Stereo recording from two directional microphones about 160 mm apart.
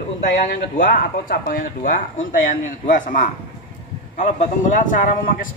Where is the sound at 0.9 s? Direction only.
60° left (ahead or behind).